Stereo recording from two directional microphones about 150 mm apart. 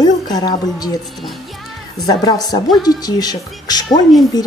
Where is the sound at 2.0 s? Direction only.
25° left (ahead or behind).